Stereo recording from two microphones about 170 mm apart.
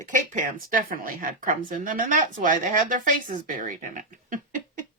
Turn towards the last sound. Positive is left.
turn(degrees=-50)  # may be behind; listen again after turning